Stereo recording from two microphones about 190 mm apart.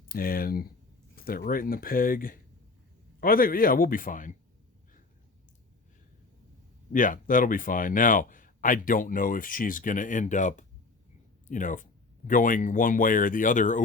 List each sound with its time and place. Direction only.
0.1 s speech: 50° left (ahead or behind)
6.9 s speech: 45° left (ahead or behind)